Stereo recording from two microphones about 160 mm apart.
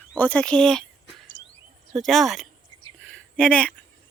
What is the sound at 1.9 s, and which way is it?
Speech, centre (ahead or behind).